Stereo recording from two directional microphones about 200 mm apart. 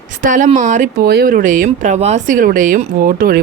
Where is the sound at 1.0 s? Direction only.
50° right (ahead or behind).